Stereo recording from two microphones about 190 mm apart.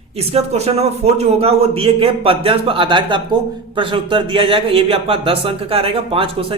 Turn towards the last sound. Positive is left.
turn(degrees=-30)  # may be behind; listen again after turning